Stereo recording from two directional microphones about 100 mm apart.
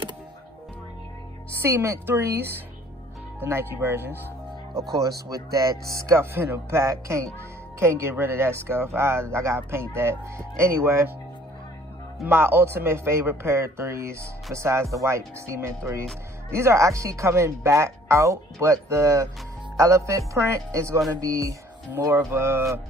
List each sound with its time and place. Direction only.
1.6 s speech: 25° right (ahead or behind)
5.0 s speech: 35° right (ahead or behind)
12.3 s speech: 25° right (ahead or behind)